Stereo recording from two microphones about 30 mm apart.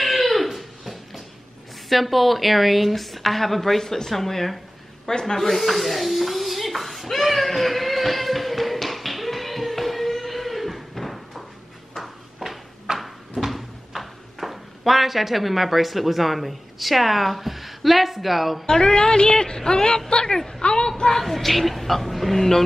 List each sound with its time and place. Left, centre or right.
0.0 s a sound: centre
1.9 s a woman's voice: centre
5.6 s a sound: centre
12.9 s cupboard open or close: centre
13.4 s speech: centre
18.7 s speech: left
20.3 s speech: centre
20.6 s a sound: left
21.2 s a woman's voice: centre